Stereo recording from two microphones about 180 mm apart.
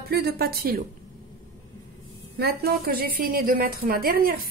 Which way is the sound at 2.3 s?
60° right (ahead or behind).